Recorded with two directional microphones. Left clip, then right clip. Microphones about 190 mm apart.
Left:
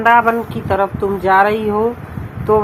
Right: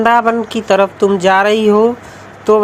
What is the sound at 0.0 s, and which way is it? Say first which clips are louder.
Speech: right 1 dB; 65° right (ahead or behind).